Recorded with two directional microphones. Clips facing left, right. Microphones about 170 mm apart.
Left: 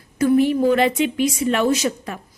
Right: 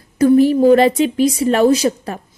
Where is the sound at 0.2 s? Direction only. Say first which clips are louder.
Right 5 dB; 35° right (ahead or behind).